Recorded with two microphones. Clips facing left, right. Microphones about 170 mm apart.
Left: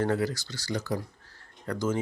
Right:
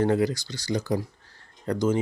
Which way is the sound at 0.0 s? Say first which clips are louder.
Right 4 dB; 15° right (ahead or behind).